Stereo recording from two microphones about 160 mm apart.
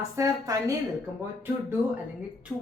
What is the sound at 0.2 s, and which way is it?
Speech, 20° right (ahead or behind).